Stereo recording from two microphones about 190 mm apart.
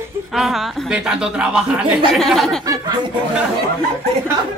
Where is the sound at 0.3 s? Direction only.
Centre (ahead or behind).